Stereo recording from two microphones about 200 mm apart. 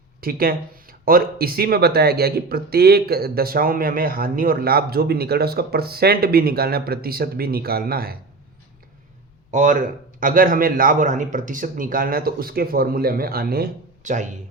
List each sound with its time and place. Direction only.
0.2 s speech: 50° right (ahead or behind)
9.5 s speech: 40° right (ahead or behind)